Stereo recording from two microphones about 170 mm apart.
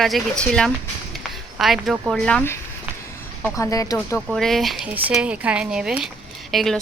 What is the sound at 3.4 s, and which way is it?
Speech, 20° left (ahead or behind).